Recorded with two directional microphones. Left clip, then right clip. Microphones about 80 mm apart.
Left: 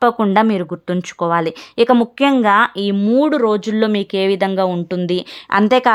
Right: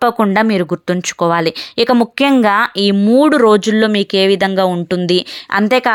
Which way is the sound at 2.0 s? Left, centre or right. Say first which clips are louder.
Right 2 dB; right.